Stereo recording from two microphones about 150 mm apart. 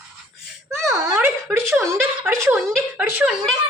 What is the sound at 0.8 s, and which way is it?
A woman's voice, 20° right (ahead or behind).